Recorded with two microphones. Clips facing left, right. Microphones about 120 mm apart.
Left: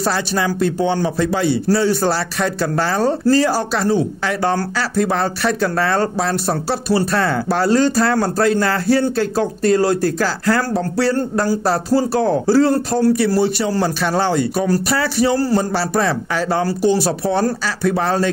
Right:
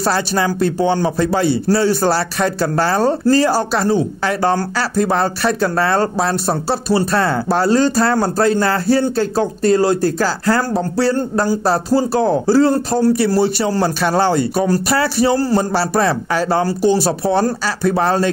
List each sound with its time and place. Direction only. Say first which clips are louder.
0.0 s a man's voice: right 2 dB; 35° right (ahead or behind)